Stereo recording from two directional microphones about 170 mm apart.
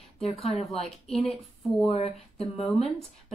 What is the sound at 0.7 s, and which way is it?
Speech, centre (ahead or behind).